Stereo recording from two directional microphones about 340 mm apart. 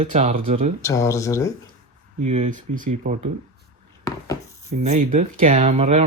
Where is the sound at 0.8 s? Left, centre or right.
Centre.